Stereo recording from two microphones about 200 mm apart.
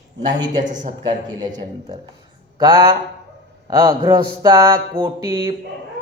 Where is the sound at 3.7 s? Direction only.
20° right (ahead or behind).